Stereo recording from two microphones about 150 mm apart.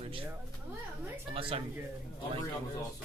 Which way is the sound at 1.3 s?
35° right (ahead or behind).